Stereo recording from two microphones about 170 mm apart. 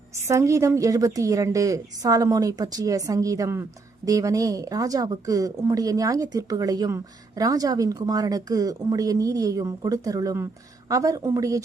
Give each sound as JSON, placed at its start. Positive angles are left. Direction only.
{"t": 0.3, "sound": "a woman's voice", "side_deg": -20}